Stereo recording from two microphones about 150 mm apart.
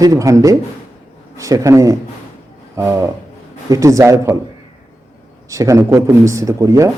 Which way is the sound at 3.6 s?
20° right (ahead or behind).